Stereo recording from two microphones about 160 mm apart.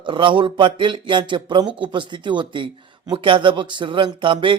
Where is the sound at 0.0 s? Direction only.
30° right (ahead or behind).